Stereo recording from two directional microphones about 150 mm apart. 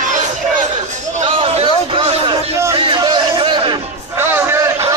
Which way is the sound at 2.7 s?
35° right (ahead or behind).